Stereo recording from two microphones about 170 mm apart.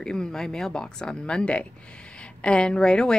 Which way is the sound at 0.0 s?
5° left (ahead or behind).